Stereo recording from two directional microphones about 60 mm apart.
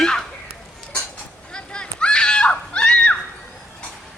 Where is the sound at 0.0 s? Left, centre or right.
Centre.